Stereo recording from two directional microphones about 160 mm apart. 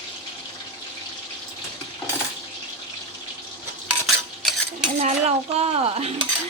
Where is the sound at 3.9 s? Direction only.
Centre (ahead or behind).